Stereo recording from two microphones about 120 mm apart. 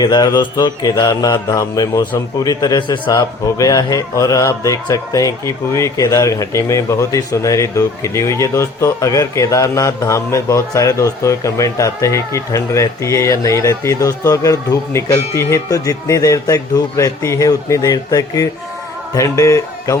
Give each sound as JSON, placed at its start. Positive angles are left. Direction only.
{"t": 0.0, "sound": "mantra", "side_deg": 35}
{"t": 19.1, "sound": "speech", "side_deg": 25}